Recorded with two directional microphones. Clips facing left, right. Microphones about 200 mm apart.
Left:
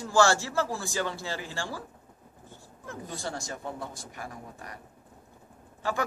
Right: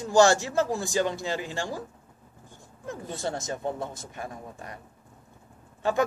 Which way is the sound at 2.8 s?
20° right (ahead or behind).